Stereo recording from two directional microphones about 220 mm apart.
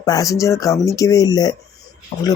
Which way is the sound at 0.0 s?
15° left (ahead or behind).